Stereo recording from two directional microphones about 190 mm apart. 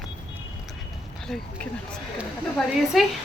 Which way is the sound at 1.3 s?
5° left (ahead or behind).